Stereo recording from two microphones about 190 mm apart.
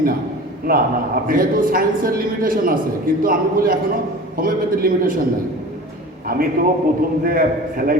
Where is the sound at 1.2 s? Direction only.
50° right (ahead or behind).